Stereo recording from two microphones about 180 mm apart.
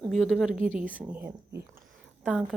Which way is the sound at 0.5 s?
45° right (ahead or behind).